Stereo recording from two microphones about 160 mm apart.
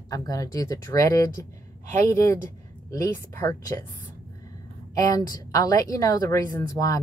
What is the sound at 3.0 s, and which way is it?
Speech, 20° left (ahead or behind).